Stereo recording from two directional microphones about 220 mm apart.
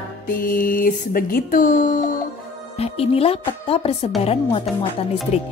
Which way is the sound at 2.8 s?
25° left (ahead or behind).